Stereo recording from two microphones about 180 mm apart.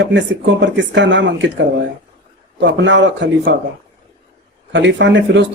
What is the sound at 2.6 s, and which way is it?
Speech, 85° right.